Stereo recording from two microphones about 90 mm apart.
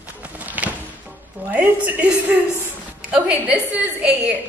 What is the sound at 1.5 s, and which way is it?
Speech, 15° right (ahead or behind).